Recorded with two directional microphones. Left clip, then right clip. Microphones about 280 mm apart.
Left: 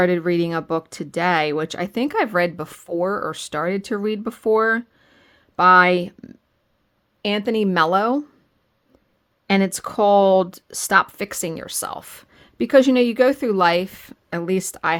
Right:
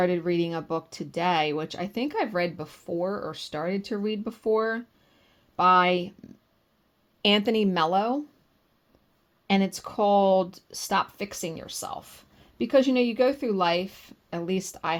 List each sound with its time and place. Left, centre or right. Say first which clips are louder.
0.0 s speech: left 6 dB; left
7.2 s speech: left 2 dB; centre
9.5 s speech: left 6 dB; left